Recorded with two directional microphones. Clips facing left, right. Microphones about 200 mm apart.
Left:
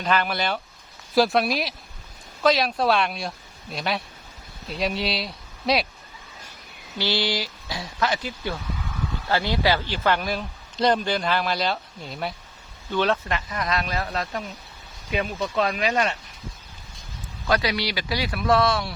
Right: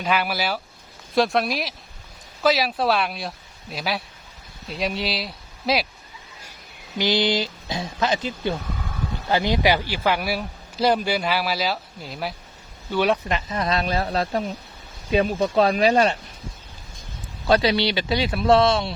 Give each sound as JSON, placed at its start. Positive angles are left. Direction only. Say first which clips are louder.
{"t": 0.0, "sound": "speech", "louder": "even", "side_deg": -5}
{"t": 7.0, "sound": "speech", "louder": "right 4 dB", "side_deg": -20}
{"t": 12.9, "sound": "speech", "louder": "right 2 dB", "side_deg": -10}
{"t": 17.4, "sound": "speech", "louder": "right 5 dB", "side_deg": -30}